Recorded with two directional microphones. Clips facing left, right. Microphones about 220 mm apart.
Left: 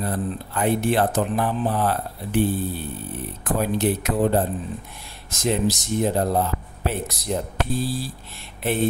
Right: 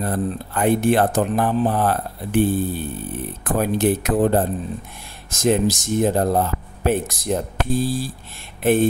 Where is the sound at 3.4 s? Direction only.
50° right (ahead or behind).